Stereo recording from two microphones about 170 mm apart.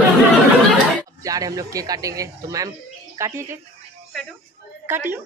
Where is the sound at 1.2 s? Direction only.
20° right (ahead or behind).